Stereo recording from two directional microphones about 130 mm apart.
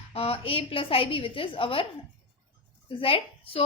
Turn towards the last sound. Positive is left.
turn(degrees=45)  # may be behind; listen again after turning